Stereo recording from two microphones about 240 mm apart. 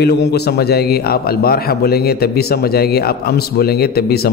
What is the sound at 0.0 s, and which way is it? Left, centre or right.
A man's voice, left.